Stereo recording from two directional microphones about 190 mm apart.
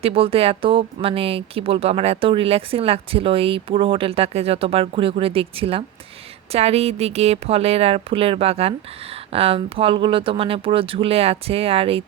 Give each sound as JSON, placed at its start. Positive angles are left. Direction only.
{"t": 0.0, "sound": "a woman's voice", "side_deg": -30}